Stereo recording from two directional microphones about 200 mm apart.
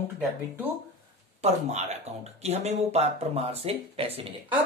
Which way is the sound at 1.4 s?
35° right (ahead or behind).